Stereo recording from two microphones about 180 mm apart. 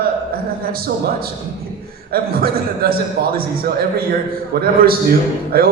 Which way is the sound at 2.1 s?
55° right (ahead or behind).